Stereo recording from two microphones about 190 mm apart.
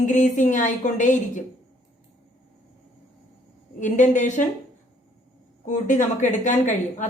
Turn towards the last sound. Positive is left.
turn(degrees=40)  # may be behind; listen again after turning